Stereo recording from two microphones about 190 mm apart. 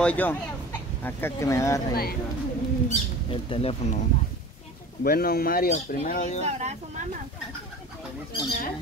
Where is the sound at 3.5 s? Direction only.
30° left (ahead or behind).